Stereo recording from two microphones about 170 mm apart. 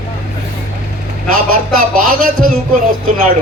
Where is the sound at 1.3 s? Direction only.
55° right (ahead or behind).